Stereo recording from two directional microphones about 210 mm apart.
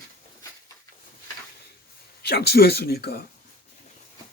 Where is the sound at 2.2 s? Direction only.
50° left (ahead or behind).